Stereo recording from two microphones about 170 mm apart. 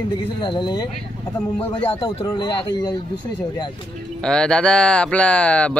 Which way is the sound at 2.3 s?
25° left (ahead or behind).